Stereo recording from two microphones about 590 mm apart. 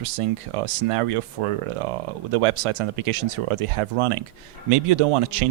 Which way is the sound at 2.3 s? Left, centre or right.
Right.